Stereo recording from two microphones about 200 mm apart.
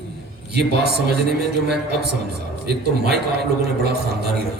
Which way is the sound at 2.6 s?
55° right (ahead or behind).